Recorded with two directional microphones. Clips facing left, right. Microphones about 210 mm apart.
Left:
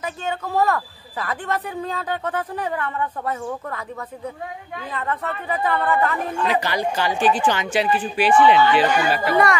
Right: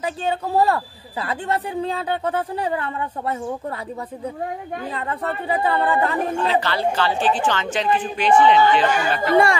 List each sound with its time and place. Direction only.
0.0 s speech: 30° right (ahead or behind)
4.9 s speech: 30° right (ahead or behind)
6.4 s a woman's voice: 15° left (ahead or behind)
9.3 s speech: 25° right (ahead or behind)